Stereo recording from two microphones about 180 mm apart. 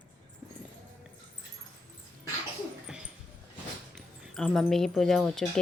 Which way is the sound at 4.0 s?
Centre (ahead or behind).